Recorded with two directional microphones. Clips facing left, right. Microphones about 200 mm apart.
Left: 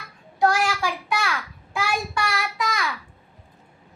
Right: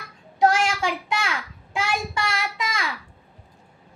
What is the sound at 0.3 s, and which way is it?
Child singing, 20° right (ahead or behind).